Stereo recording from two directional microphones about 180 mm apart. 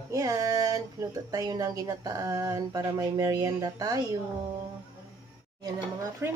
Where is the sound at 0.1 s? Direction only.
20° right (ahead or behind).